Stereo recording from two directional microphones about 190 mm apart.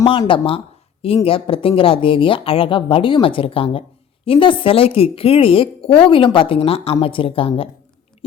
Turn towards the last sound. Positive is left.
turn(degrees=30)  # may be behind; listen again after turning